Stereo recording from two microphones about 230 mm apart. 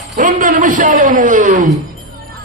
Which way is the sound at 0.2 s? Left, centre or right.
Right.